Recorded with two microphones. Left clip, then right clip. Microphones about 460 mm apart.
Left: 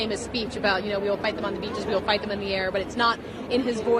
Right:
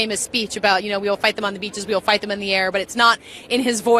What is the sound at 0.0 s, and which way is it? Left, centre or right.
A woman's voice, right.